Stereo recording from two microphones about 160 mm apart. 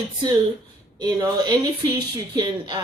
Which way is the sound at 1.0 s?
25° right (ahead or behind).